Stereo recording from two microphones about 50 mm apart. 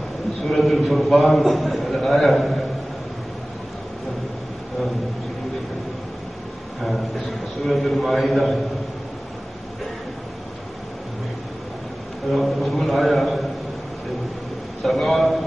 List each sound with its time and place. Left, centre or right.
0.5 s a man's voice: centre
7.6 s a man's voice: centre
12.3 s a man's voice: centre
14.8 s a man's voice: centre